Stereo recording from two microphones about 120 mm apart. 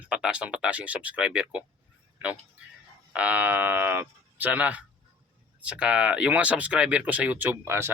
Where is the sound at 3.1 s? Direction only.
10° right (ahead or behind).